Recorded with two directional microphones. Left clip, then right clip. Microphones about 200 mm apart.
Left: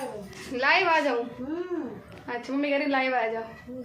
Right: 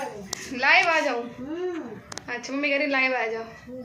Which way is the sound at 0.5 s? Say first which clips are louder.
Right 2 dB; centre (ahead or behind).